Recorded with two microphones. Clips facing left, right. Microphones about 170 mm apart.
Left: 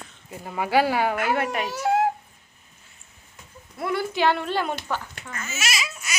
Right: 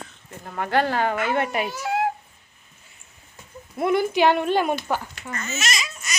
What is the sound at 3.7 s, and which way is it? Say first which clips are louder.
A woman's voice: right 5 dB; 20° right (ahead or behind).